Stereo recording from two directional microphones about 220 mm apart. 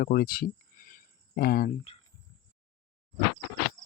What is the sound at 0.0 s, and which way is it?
Insect, 40° left (ahead or behind).